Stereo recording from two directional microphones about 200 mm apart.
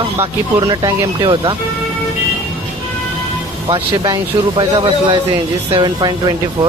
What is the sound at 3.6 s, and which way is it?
Speech, 20° right (ahead or behind).